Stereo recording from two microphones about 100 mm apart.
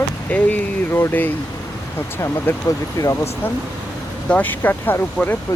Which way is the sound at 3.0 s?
30° left (ahead or behind).